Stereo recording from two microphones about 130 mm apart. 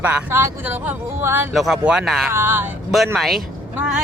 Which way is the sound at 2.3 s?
15° right (ahead or behind).